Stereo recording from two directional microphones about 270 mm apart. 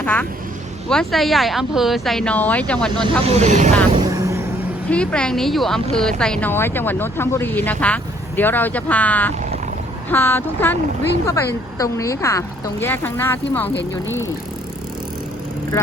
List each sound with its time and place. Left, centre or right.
0.0 s a woman's voice: centre
3.2 s speech: right
4.0 s vehicle: centre
4.9 s a woman's voice: centre